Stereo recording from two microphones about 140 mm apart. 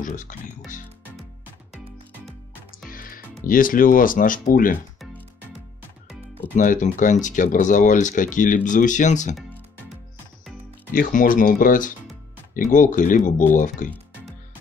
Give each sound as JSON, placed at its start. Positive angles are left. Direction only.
{"t": 0.0, "sound": "speech", "side_deg": 70}
{"t": 2.9, "sound": "speech", "side_deg": 90}
{"t": 6.5, "sound": "speech", "side_deg": 70}
{"t": 10.9, "sound": "speech", "side_deg": 80}